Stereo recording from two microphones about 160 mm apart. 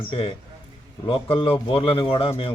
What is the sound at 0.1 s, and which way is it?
A man's voice, 35° left (ahead or behind).